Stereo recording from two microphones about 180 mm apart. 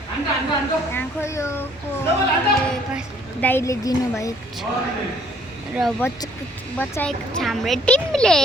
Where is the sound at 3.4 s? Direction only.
15° left (ahead or behind).